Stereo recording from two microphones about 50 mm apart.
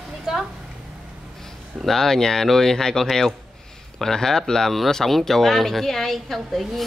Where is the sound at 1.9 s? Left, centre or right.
Centre.